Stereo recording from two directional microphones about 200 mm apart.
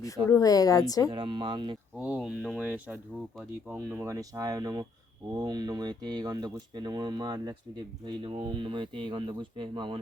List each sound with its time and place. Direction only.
0.3 s a woman's voice: 15° left (ahead or behind)
1.1 s speech: 25° right (ahead or behind)
2.0 s speech: 5° right (ahead or behind); by 10.0 s 25° right (ahead or behind)